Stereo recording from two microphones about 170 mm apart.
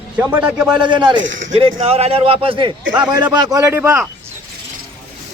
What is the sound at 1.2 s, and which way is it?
Speech, 90° right.